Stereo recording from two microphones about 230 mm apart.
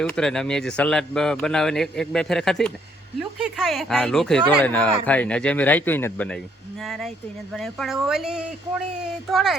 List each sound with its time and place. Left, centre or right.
0.0 s speech: centre